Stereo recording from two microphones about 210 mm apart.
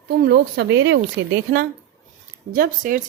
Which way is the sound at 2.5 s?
40° right (ahead or behind).